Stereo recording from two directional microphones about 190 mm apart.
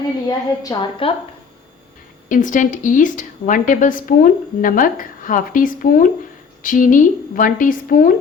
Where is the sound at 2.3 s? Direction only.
45° left (ahead or behind).